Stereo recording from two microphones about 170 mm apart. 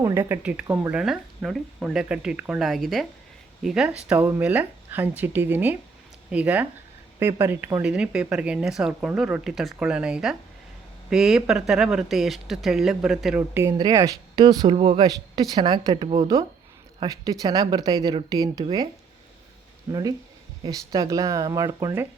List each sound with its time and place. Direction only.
0.0 s speech: 15° right (ahead or behind)
19.9 s speech: 20° right (ahead or behind)